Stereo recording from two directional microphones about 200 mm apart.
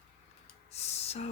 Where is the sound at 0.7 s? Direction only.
30° left (ahead or behind).